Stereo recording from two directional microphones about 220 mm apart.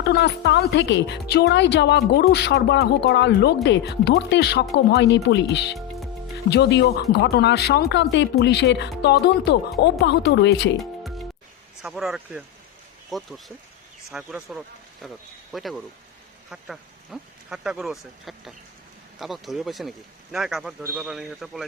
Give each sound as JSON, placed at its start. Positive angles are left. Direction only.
{"t": 0.0, "sound": "speech", "side_deg": 50}
{"t": 10.8, "sound": "music", "side_deg": 0}
{"t": 11.8, "sound": "a man's voice", "side_deg": 0}